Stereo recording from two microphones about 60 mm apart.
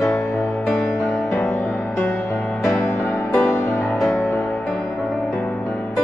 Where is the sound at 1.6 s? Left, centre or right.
Left.